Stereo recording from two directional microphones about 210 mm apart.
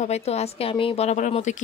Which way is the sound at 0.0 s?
30° left (ahead or behind).